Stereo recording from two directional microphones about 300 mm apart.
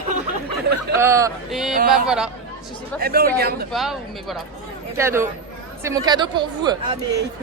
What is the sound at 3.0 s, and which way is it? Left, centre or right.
Speech, right.